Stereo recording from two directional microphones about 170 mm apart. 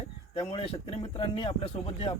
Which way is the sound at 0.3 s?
30° left (ahead or behind).